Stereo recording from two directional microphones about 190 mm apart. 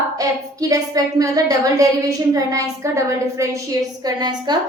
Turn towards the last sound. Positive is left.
turn(degrees=-20)  # may be behind; listen again after turning